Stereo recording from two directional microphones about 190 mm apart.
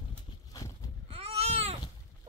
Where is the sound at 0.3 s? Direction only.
20° left (ahead or behind).